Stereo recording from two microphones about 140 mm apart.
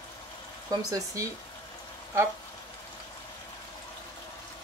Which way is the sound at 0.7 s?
25° right (ahead or behind).